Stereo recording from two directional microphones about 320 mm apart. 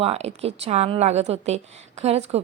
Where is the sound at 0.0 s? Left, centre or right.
Centre.